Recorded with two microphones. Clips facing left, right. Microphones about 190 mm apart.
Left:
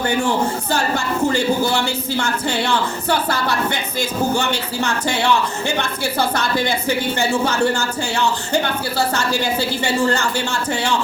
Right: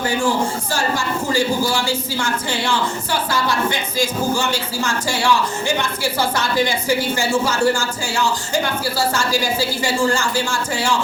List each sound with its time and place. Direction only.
0.7 s speech: 60° left (ahead or behind)